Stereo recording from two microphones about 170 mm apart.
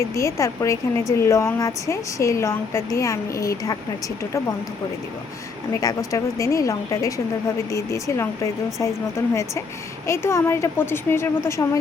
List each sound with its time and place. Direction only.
0.0 s a woman's voice: 15° left (ahead or behind)
5.7 s a woman's voice: 20° left (ahead or behind)